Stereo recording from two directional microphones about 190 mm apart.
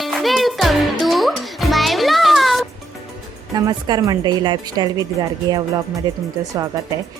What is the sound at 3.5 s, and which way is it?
A woman's voice, 20° right (ahead or behind).